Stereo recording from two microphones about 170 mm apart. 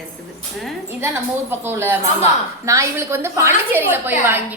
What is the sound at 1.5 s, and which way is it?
A woman's voice, 15° right (ahead or behind).